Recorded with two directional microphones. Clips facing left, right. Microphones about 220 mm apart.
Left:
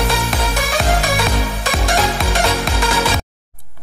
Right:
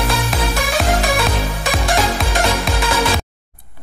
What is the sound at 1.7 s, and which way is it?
Music, centre (ahead or behind).